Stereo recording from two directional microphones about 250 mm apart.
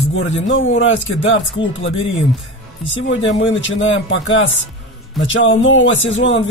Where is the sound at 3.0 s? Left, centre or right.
Left.